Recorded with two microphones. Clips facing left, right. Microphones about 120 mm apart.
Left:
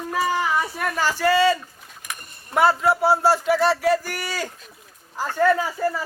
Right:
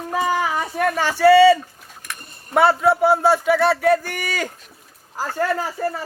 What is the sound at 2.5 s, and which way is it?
Speech, 60° right (ahead or behind).